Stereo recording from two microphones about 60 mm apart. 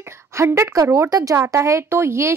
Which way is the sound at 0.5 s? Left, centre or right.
Right.